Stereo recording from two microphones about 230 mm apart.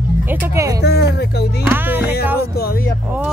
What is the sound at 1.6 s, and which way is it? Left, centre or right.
Speech, centre.